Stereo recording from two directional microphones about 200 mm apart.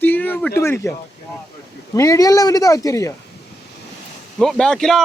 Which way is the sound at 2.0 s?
15° left (ahead or behind).